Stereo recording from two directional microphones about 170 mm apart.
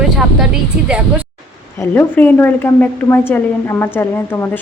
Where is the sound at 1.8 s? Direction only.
10° left (ahead or behind).